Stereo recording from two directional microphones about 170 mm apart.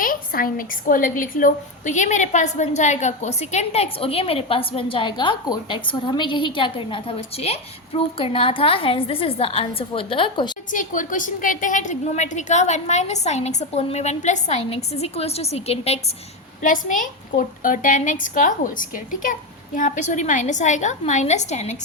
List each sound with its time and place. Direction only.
0.0 s a woman's voice: 55° left (ahead or behind); by 10.5 s 30° left (ahead or behind)
10.7 s a woman's voice: 50° left (ahead or behind)
16.6 s a woman's voice: 50° left (ahead or behind)